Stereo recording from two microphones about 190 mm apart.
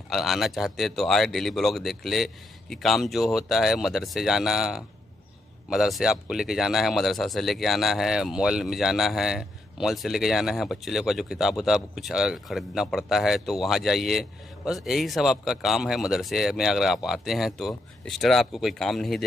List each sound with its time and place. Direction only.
0.1 s speech: centre (ahead or behind)